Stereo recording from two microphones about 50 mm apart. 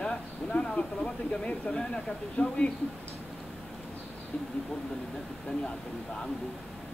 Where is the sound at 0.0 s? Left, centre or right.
Centre.